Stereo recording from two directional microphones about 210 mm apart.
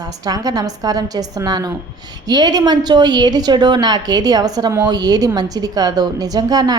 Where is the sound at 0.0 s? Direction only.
15° right (ahead or behind).